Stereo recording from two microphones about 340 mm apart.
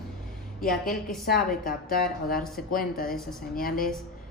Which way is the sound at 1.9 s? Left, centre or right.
Left.